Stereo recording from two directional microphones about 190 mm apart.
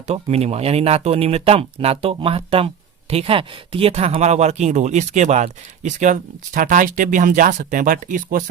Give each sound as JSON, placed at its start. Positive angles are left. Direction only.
{"t": 0.1, "sound": "speech", "side_deg": -35}